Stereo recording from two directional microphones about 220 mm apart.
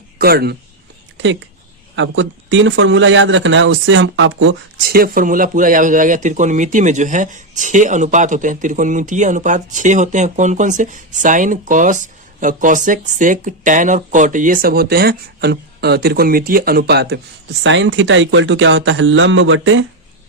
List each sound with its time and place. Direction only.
0.2 s speech: 45° right (ahead or behind)
2.0 s speech: 55° right (ahead or behind)
4.9 s speech: 40° right (ahead or behind); by 19.8 s 60° right (ahead or behind)